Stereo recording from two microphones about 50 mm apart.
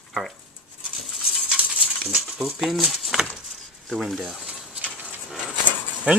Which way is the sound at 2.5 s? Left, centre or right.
Centre.